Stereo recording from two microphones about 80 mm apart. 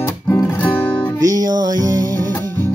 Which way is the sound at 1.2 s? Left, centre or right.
Right.